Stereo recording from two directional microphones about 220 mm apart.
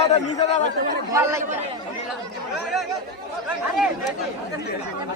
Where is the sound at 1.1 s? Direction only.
15° right (ahead or behind).